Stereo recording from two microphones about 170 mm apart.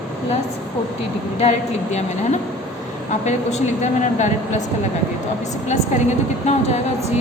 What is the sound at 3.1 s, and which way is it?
A woman's voice, 45° left (ahead or behind).